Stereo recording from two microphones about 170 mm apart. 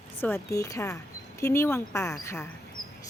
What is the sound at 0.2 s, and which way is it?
Speech, 15° left (ahead or behind).